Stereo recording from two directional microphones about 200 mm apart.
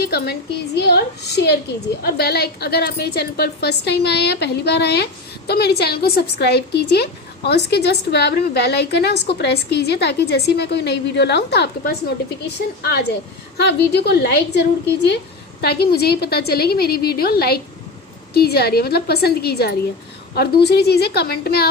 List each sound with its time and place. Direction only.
0.0 s a woman's voice: 55° left (ahead or behind)
15.6 s a woman's voice: 50° left (ahead or behind)